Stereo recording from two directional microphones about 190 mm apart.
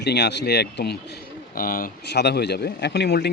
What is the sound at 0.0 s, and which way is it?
Speech, 65° left (ahead or behind).